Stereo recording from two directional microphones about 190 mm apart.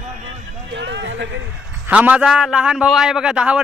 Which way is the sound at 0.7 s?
70° right (ahead or behind).